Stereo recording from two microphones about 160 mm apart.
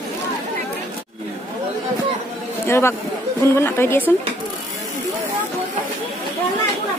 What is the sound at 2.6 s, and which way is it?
A woman's voice, 15° left (ahead or behind).